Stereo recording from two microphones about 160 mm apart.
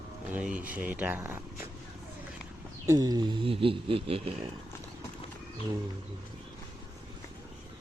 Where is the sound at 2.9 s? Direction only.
25° right (ahead or behind).